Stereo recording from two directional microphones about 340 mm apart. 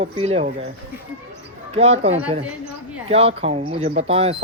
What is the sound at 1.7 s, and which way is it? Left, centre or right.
Speech, centre.